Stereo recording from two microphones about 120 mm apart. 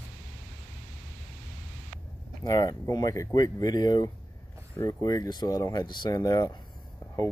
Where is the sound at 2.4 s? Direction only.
30° left (ahead or behind).